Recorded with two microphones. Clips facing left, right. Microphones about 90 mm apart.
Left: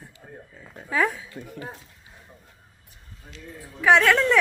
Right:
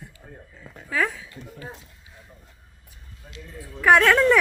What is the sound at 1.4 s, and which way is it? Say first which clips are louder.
Speech: left 3 dB; 50° left (ahead or behind).